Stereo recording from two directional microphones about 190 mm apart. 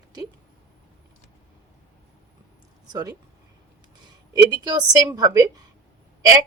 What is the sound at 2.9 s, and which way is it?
Speech, 20° right (ahead or behind).